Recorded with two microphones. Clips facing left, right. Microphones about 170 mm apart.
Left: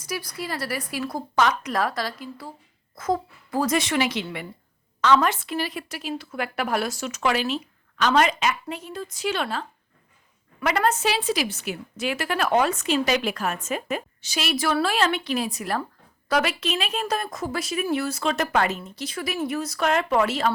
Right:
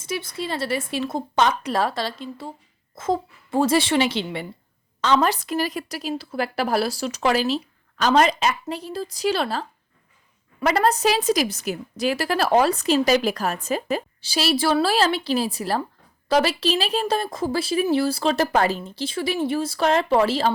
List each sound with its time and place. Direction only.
0.0 s a woman's voice: 25° right (ahead or behind)